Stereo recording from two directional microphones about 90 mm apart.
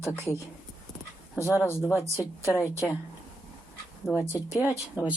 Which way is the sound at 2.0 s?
35° left (ahead or behind).